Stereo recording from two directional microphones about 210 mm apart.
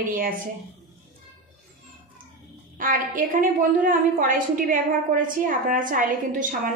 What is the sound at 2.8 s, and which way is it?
A woman's voice, 40° right (ahead or behind).